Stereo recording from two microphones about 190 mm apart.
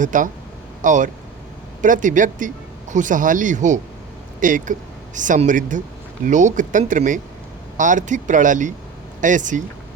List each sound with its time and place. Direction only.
0.0 s speech: 45° right (ahead or behind)